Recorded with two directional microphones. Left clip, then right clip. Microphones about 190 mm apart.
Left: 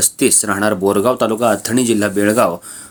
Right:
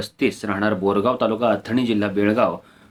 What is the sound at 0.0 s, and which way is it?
Speech, 40° left (ahead or behind).